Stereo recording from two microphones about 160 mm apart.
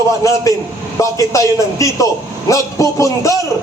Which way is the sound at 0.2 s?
20° left (ahead or behind).